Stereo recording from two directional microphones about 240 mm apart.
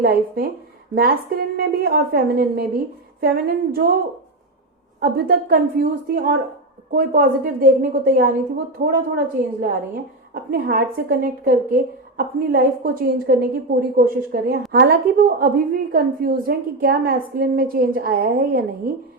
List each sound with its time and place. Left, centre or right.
0.0 s a woman's voice: right
4.9 s a woman's voice: right